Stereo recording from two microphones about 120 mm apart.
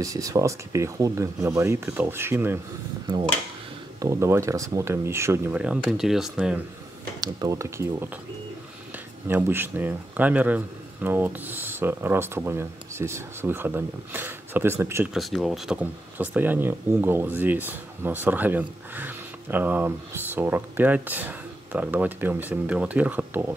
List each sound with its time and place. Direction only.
0.0 s speech: 30° right (ahead or behind)
4.0 s speech: 25° right (ahead or behind)
5.5 s speech: 10° right (ahead or behind)
7.2 s speech: 30° right (ahead or behind)
9.3 s speech: 15° right (ahead or behind)
15.1 s speech: centre (ahead or behind)